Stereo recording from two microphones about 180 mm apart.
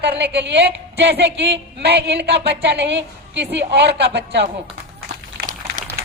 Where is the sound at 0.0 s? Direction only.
70° right (ahead or behind).